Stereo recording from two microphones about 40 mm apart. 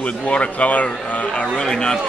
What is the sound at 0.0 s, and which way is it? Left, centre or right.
Speech, left.